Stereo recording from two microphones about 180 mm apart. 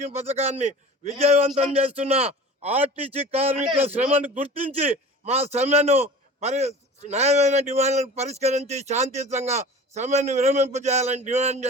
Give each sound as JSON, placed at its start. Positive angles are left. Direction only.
{"t": 0.0, "sound": "a man's voice", "side_deg": -35}